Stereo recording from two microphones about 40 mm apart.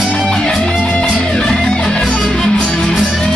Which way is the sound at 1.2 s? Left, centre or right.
Left.